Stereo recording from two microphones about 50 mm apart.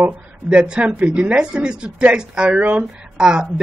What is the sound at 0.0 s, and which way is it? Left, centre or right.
Speech, right.